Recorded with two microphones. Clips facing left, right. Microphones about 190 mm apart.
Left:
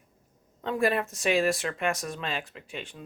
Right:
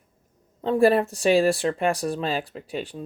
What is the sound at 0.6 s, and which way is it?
Speech, 30° right (ahead or behind).